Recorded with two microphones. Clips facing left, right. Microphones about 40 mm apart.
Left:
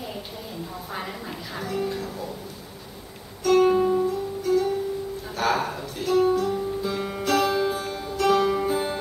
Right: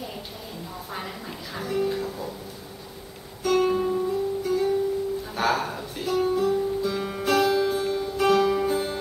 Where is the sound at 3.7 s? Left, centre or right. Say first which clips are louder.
Left 4 dB; centre.